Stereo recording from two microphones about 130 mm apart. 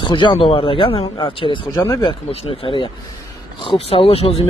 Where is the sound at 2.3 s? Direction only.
40° left (ahead or behind).